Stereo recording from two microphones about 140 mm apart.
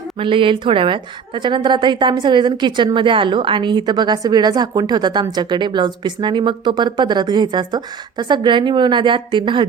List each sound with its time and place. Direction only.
0.2 s a woman's voice: 40° right (ahead or behind)